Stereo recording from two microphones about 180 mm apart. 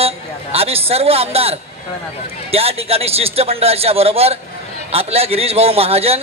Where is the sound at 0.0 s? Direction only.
35° right (ahead or behind).